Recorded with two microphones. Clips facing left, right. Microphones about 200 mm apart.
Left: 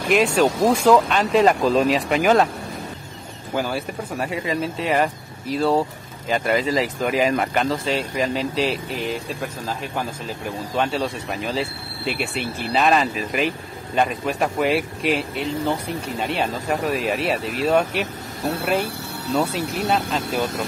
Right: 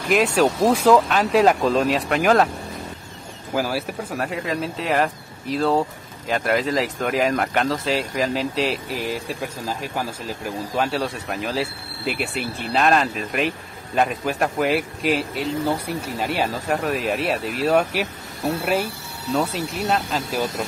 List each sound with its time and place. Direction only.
0.1 s speech: 5° right (ahead or behind)
3.5 s speech: 5° right (ahead or behind)
10.8 s speech: centre (ahead or behind)
19.3 s speech: centre (ahead or behind)